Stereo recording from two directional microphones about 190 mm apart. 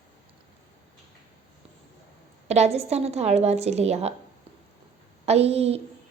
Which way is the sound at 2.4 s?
35° right (ahead or behind).